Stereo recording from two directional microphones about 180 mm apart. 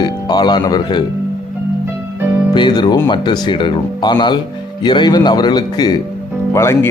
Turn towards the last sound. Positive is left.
turn(degrees=15)  # may be behind; listen again after turning